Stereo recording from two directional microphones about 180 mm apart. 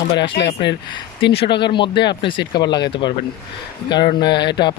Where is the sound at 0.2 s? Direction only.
80° left.